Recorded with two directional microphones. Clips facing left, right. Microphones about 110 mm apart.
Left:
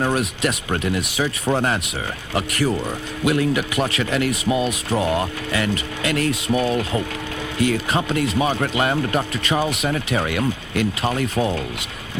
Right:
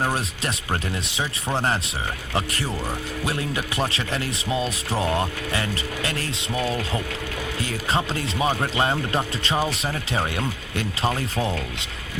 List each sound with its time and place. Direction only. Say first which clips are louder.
0.0 s speech: left 5 dB; 30° right (ahead or behind)
2.3 s speech: left 7 dB; 30° right (ahead or behind)
4.4 s speech: left 5 dB; 25° left (ahead or behind)
5.5 s speech: left 4 dB; 30° right (ahead or behind)
6.5 s speech: left 3 dB; 25° left (ahead or behind)
7.6 s speech: left 6 dB; 30° right (ahead or behind)
11.3 s speech: left 4 dB; 25° left (ahead or behind)